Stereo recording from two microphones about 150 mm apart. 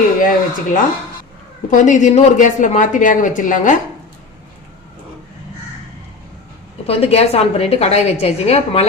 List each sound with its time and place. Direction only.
0.2 s a sound: 65° left (ahead or behind)
1.7 s speech: 55° left (ahead or behind)
6.8 s a woman's voice: 40° left (ahead or behind)